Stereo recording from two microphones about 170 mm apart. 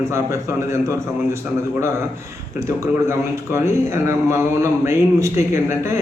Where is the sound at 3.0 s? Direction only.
15° right (ahead or behind).